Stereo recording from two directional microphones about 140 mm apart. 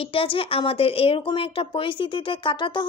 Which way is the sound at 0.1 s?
40° left (ahead or behind).